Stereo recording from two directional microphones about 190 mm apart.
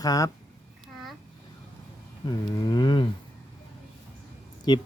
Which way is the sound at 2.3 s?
20° left (ahead or behind).